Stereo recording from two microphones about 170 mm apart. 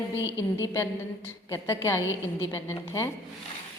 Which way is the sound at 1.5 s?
15° left (ahead or behind).